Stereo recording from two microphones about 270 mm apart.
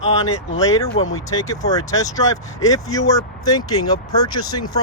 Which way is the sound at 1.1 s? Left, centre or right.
Centre.